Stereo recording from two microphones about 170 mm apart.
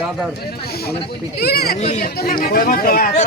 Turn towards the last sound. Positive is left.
turn(degrees=60)  # may be behind; listen again after turning